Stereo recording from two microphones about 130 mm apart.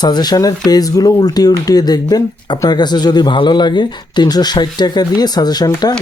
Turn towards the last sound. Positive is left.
turn(degrees=30)  # may be behind; listen again after turning